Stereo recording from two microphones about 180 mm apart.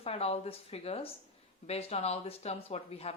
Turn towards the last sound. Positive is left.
turn(degrees=35)  # may be behind; listen again after turning